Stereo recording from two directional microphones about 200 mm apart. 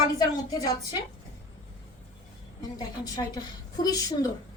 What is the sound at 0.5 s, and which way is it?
Speech, 20° left (ahead or behind).